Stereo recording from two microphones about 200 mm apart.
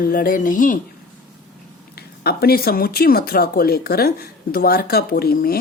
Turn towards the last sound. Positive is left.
turn(degrees=45)  # may be behind; listen again after turning